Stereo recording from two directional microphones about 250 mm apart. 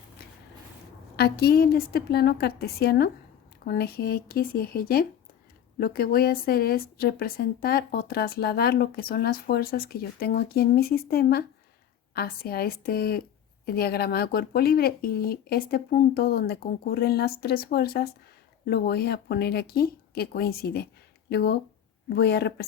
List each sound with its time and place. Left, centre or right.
1.1 s a woman's voice: left